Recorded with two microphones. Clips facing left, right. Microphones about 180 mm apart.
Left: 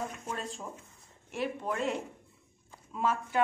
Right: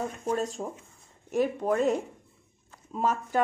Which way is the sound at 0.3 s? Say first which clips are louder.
Right 9 dB; 40° right (ahead or behind).